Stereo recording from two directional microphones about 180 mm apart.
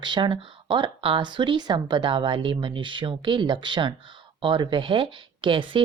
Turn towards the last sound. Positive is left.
turn(degrees=-30)  # may be behind; listen again after turning